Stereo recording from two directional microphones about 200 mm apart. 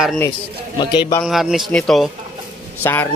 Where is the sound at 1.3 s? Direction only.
Centre (ahead or behind).